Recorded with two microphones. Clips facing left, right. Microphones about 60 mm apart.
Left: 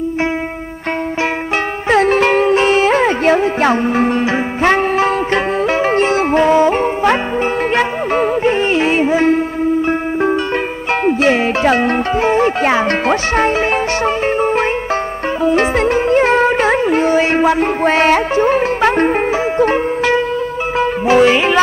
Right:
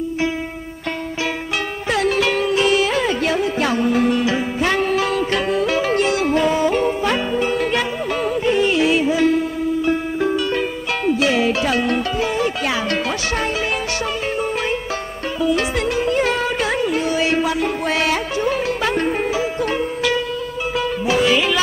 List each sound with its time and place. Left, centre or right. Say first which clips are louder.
1.9 s music: left 7 dB; left
11.1 s speech: left 3 dB; left
14.0 s music: left 8 dB; left